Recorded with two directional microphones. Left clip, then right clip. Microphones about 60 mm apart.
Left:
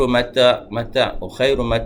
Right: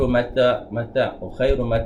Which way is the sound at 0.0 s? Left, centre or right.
Left.